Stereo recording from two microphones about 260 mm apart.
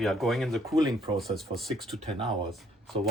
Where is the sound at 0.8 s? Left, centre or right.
Centre.